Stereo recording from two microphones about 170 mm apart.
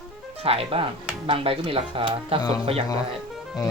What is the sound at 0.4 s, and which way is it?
Speech, 35° right (ahead or behind).